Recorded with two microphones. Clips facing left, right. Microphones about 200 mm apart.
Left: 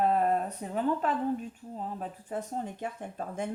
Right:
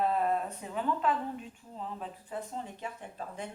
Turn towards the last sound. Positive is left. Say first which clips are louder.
# left 5 dB
turn(degrees=50)  # may be behind; listen again after turning